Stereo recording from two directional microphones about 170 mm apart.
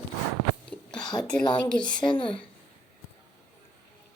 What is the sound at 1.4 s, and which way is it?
A woman's voice, 25° left (ahead or behind).